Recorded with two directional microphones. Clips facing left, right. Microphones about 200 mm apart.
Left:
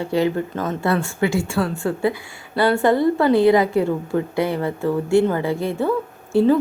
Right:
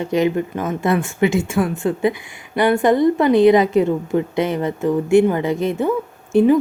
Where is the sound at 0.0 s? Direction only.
20° right (ahead or behind).